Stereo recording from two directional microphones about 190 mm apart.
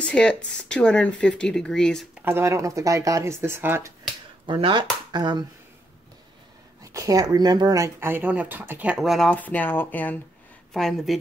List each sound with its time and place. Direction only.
0.0 s speech: 5° left (ahead or behind)
2.2 s speech: 15° right (ahead or behind)
4.5 s speech: 25° right (ahead or behind)
6.8 s speech: 15° right (ahead or behind); by 11.1 s centre (ahead or behind)